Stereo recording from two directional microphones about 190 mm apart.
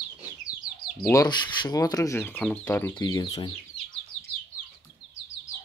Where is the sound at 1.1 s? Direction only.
20° left (ahead or behind).